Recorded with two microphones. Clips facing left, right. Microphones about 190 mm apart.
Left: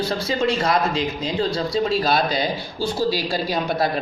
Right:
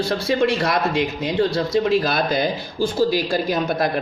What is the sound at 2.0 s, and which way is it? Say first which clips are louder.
A man's voice: right 1 dB; 50° right (ahead or behind).